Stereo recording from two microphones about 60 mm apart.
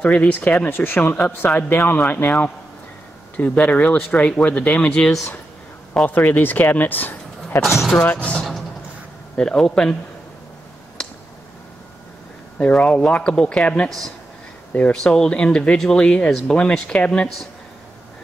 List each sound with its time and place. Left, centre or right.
0.0 s speech: left
6.0 s speech: left
7.6 s speech: centre
8.2 s speech: centre
11.0 s a sound: centre
12.5 s speech: centre
13.8 s speech: centre
16.5 s speech: centre